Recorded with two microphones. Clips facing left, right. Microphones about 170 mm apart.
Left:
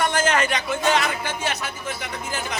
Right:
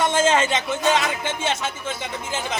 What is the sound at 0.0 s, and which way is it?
A man's voice, 25° right (ahead or behind).